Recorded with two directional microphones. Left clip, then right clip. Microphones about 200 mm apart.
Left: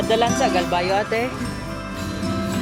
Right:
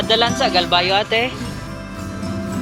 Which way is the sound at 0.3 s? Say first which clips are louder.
Right 1 dB; centre (ahead or behind).